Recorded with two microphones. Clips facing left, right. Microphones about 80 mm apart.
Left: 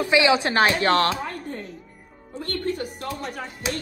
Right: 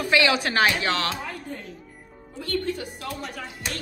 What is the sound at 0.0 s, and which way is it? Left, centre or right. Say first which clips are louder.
Speech: left 3 dB; left.